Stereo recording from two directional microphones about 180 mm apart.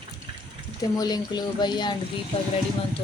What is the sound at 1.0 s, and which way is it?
Speech, 20° left (ahead or behind).